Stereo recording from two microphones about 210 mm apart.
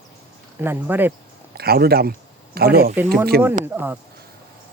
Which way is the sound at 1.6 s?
50° right (ahead or behind).